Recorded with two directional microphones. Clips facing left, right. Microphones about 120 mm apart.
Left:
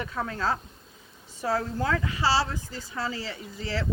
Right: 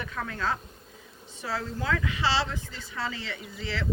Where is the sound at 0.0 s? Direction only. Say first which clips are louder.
Left 2 dB; 30° left (ahead or behind).